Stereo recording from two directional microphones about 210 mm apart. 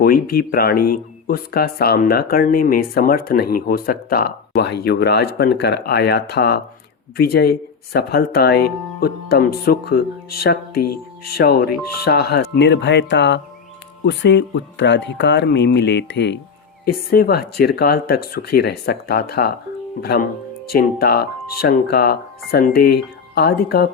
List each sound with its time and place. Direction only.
0.0 s speech: 45° left (ahead or behind)